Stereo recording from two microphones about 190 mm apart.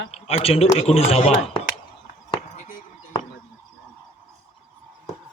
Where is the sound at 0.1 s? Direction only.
30° left (ahead or behind).